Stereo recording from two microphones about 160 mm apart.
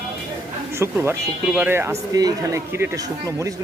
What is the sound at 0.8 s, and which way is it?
Speech, 15° right (ahead or behind).